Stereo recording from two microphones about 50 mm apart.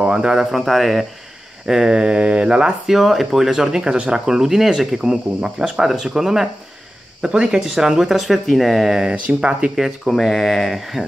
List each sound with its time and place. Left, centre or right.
0.0 s speech: centre
0.6 s speech: centre
1.7 s speech: centre
2.9 s speech: centre
9.1 s speech: right
9.8 s speech: centre